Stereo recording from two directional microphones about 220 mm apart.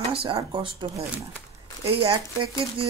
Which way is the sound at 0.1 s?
25° right (ahead or behind).